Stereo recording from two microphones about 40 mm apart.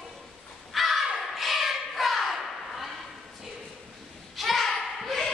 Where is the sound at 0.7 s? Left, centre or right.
Centre.